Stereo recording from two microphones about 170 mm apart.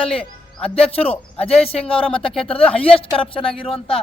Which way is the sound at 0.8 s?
35° left (ahead or behind).